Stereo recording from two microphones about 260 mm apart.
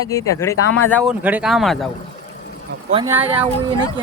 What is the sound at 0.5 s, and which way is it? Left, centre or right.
Speech, left.